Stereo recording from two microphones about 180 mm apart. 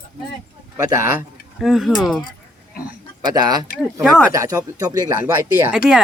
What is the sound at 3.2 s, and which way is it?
Speech, 25° right (ahead or behind).